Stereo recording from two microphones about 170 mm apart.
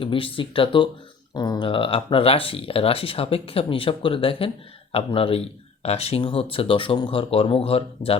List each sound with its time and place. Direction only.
0.0 s speech: 30° left (ahead or behind)